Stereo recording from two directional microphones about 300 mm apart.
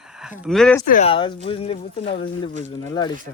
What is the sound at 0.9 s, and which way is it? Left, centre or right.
Speech, left.